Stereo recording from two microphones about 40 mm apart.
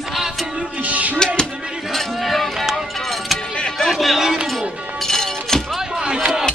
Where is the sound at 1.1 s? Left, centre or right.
Centre.